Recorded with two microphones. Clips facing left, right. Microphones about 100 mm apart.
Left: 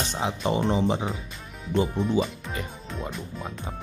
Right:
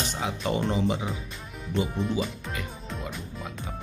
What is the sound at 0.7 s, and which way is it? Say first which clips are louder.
Speech: left 3 dB; 30° left (ahead or behind).